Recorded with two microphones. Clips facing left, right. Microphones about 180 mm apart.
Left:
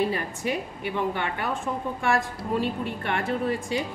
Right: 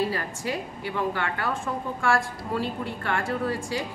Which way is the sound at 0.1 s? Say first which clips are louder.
Left 2 dB; 20° left (ahead or behind).